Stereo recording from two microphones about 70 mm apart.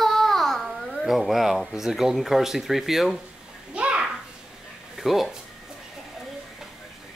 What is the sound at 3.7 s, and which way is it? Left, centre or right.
Bathtub, centre.